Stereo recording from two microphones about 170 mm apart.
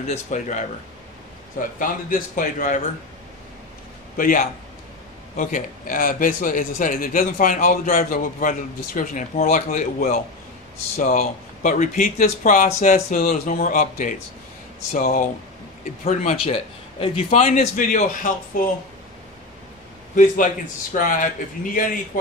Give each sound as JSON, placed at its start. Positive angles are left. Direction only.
{"t": 0.0, "sound": "a man's voice", "side_deg": 40}
{"t": 1.8, "sound": "a man's voice", "side_deg": 55}
{"t": 4.2, "sound": "a man's voice", "side_deg": 55}
{"t": 16.0, "sound": "a man's voice", "side_deg": 40}
{"t": 20.2, "sound": "a man's voice", "side_deg": 50}